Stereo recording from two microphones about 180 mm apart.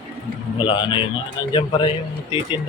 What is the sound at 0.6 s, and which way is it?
A man's voice, 25° left (ahead or behind).